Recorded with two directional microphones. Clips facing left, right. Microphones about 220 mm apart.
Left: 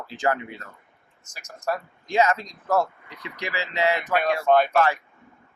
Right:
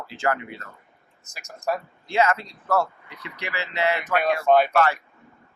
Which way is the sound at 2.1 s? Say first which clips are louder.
Even; 15° left (ahead or behind).